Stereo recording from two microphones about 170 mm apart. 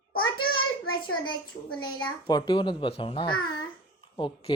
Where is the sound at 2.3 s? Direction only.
25° left (ahead or behind).